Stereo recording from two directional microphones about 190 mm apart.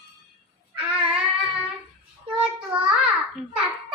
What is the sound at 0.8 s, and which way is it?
Music, 5° right (ahead or behind).